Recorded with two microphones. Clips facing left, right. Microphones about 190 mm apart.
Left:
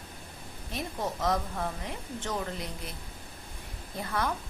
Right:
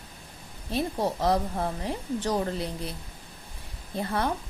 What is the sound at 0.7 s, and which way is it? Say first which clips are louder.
A woman's voice: right 7 dB; 30° right (ahead or behind).